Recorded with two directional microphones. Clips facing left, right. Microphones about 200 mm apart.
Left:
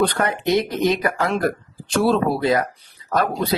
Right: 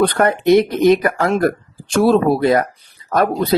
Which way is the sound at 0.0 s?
50° right (ahead or behind).